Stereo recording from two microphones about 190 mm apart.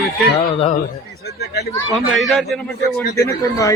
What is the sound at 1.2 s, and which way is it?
Speech, 60° left (ahead or behind).